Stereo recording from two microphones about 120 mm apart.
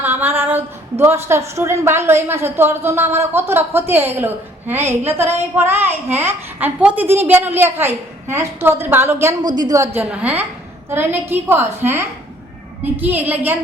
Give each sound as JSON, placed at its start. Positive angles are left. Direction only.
{"t": 0.0, "sound": "a woman's voice", "side_deg": -15}
{"t": 9.9, "sound": "a woman's voice", "side_deg": -10}